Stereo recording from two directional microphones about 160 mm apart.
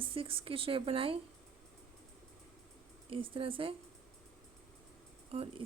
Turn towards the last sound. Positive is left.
turn(degrees=-40)  # may be behind; listen again after turning